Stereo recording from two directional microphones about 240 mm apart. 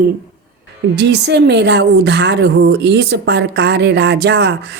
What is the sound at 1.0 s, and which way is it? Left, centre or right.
Speech, right.